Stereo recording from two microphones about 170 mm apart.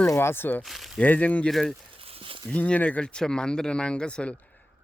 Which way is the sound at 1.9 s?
35° right (ahead or behind).